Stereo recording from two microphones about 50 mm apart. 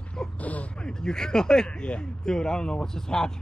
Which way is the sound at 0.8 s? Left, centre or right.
Centre.